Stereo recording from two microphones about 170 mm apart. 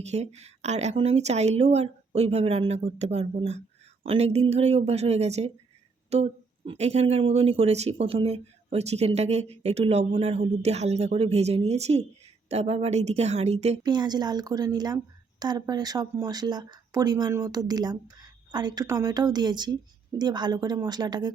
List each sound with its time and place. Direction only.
0.1 s speech: 40° right (ahead or behind)
13.8 s a woman's voice: 25° right (ahead or behind)